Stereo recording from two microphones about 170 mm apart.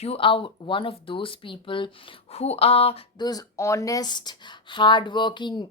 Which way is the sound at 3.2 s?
20° left (ahead or behind).